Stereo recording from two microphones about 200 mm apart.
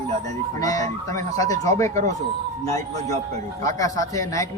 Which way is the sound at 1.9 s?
35° right (ahead or behind).